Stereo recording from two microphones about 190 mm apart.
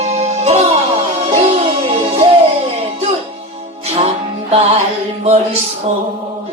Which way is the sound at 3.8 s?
35° right (ahead or behind).